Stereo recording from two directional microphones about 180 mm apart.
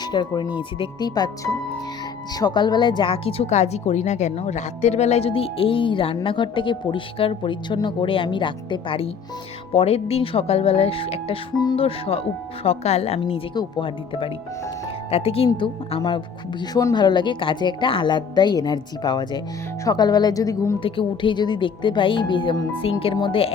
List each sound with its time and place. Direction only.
0.0 s speech: 25° left (ahead or behind)
2.3 s speech: 25° left (ahead or behind)